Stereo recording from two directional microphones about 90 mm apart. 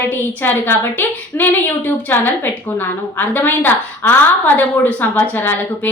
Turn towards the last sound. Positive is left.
turn(degrees=25)  # may be behind; listen again after turning